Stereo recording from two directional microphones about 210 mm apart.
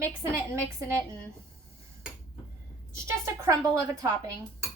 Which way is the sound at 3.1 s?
15° right (ahead or behind).